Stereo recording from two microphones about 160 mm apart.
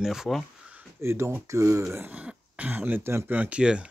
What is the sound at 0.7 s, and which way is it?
Speech, 15° right (ahead or behind).